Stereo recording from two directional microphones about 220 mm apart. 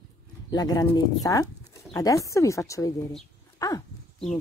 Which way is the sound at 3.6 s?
15° left (ahead or behind).